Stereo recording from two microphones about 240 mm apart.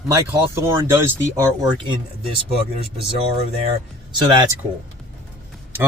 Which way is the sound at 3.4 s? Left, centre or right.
Right.